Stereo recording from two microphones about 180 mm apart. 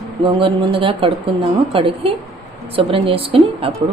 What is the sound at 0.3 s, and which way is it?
Speech, 30° right (ahead or behind).